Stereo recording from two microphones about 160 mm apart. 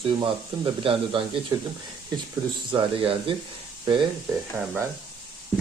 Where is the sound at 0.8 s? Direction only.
35° right (ahead or behind).